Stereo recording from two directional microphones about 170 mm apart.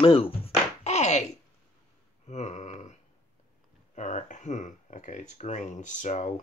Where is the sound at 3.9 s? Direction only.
45° left (ahead or behind).